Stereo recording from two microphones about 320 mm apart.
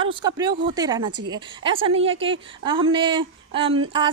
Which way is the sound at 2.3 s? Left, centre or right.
Centre.